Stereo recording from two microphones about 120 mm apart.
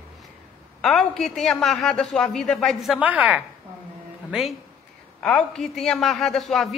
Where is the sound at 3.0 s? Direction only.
10° right (ahead or behind).